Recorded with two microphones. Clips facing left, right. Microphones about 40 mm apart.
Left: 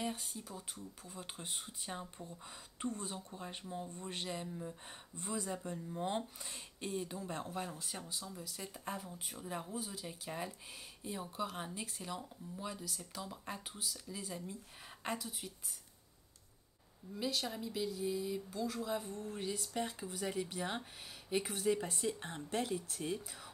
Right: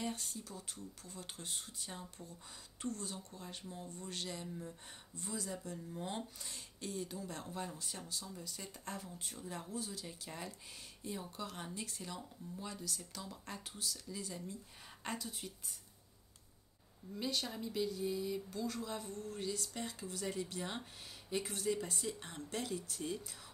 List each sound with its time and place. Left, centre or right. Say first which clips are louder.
0.0 s speech: left 1 dB; centre
5.1 s speech: left 3 dB; left
5.9 s speech: left 6 dB; centre
7.4 s speech: left 2 dB; left
8.3 s speech: left 2 dB; centre
15.4 s speech: even; centre
17.2 s speech: left 1 dB; centre